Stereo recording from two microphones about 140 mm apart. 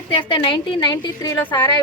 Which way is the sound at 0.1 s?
35° left (ahead or behind).